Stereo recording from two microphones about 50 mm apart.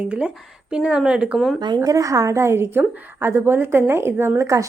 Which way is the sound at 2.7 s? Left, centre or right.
Right.